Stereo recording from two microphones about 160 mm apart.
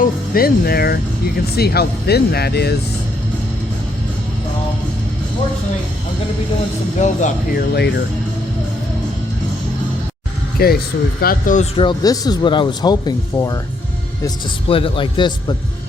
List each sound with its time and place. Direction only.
0.0 s speech: 70° left (ahead or behind); by 2.7 s 90° left
7.0 s speech: 50° left (ahead or behind)
7.7 s speech: 90° left
10.6 s speech: 75° left (ahead or behind)
11.2 s speech: 60° left (ahead or behind)
11.8 s speech: 25° left (ahead or behind)
14.3 s a man's voice: 35° left (ahead or behind)